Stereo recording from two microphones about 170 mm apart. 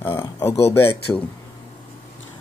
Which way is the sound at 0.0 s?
15° left (ahead or behind).